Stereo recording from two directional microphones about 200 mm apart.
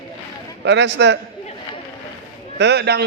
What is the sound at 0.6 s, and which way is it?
Speech, 60° right (ahead or behind).